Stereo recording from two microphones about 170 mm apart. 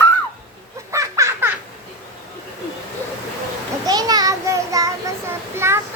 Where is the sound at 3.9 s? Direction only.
20° right (ahead or behind).